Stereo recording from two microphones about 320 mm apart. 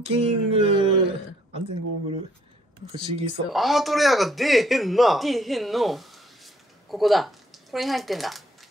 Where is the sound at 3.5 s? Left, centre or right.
Centre.